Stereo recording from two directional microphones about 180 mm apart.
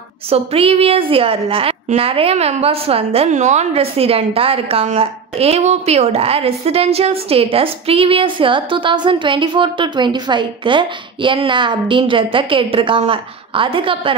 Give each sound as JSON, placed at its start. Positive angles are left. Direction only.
{"t": 0.3, "sound": "a woman's voice", "side_deg": -35}